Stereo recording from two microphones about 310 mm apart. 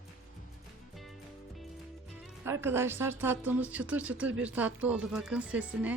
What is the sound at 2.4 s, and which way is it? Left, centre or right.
Speech, centre.